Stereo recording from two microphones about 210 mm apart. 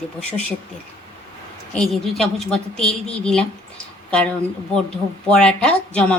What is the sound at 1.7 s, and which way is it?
Speech, centre (ahead or behind).